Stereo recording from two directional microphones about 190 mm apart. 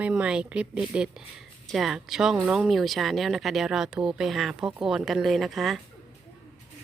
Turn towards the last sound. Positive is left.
turn(degrees=0)  # may be behind; listen again after turning